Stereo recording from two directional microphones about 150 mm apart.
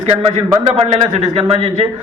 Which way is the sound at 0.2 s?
45° right (ahead or behind).